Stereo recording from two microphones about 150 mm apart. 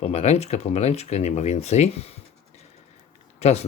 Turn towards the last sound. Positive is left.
turn(degrees=45)  # may be behind; listen again after turning